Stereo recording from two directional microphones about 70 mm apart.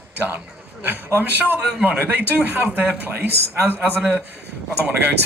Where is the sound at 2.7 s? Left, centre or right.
Right.